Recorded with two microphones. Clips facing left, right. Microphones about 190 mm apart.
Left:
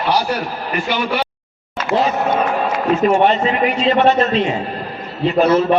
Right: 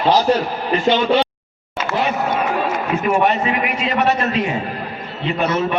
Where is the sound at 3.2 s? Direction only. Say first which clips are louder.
Left 3 dB; 30° left (ahead or behind).